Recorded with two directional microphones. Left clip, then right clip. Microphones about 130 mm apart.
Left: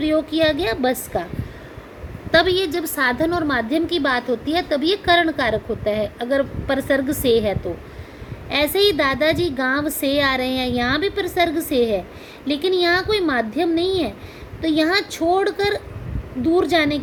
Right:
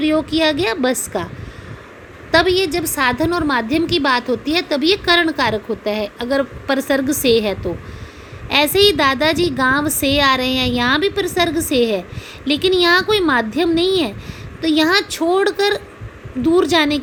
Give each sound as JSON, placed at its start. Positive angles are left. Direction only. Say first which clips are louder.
{"t": 0.0, "sound": "a woman's voice", "louder": "right 2 dB", "side_deg": -40}
{"t": 2.3, "sound": "a woman's voice", "louder": "right 2 dB", "side_deg": -30}